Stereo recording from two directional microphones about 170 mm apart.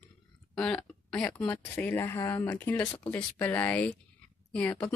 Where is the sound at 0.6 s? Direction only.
5° left (ahead or behind).